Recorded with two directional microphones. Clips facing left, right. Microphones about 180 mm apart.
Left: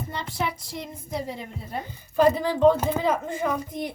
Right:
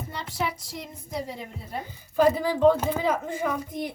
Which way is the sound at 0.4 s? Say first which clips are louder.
Right 1 dB; 55° left (ahead or behind).